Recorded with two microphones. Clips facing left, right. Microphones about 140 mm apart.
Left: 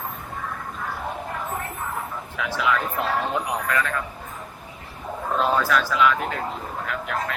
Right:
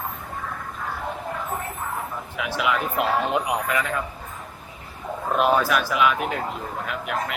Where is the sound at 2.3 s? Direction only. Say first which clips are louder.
Even; 15° right (ahead or behind).